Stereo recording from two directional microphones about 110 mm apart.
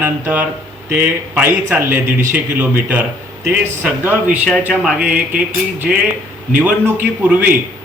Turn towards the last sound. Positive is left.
turn(degrees=-15)  # may be behind; listen again after turning